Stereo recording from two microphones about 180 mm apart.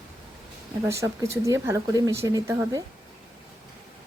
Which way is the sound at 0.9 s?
15° right (ahead or behind).